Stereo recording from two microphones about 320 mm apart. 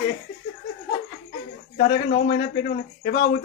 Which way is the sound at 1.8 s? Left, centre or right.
Left.